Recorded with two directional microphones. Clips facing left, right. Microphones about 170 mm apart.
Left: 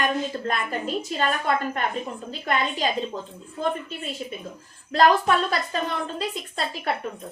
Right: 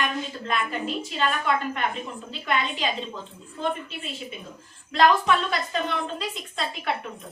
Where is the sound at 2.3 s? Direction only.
40° left (ahead or behind).